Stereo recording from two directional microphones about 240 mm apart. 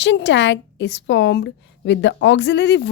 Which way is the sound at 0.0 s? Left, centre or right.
Left.